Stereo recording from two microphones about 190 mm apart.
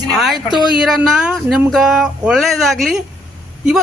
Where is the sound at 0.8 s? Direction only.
Centre (ahead or behind).